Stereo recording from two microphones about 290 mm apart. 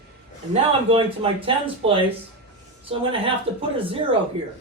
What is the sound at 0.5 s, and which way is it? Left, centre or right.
A man's voice, centre.